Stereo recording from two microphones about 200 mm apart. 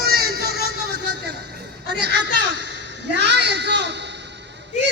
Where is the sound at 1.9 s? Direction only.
55° right (ahead or behind).